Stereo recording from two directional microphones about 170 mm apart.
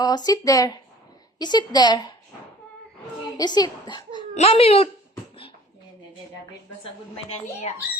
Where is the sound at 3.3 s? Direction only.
25° left (ahead or behind).